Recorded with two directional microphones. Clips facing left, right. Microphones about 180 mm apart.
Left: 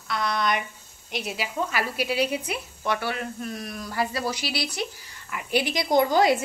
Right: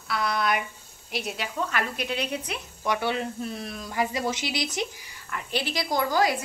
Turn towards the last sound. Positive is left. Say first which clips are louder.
# left 5 dB
turn(degrees=25)  # may be behind; listen again after turning